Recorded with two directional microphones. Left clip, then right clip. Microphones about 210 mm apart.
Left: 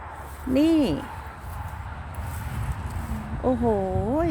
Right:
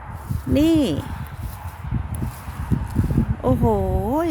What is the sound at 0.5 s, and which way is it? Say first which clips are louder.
Speech: right 3 dB; 20° right (ahead or behind).